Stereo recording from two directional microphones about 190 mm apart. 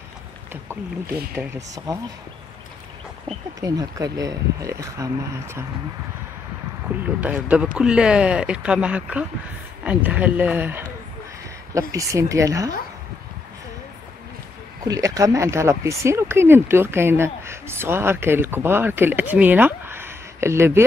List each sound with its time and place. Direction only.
1.3 s speech: 10° right (ahead or behind)
3.6 s speech: 20° right (ahead or behind)
7.2 s speech: 5° right (ahead or behind)
11.9 s speech: 15° right (ahead or behind)
14.9 s speech: 15° right (ahead or behind)